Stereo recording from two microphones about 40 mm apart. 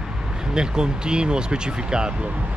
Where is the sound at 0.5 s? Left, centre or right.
Centre.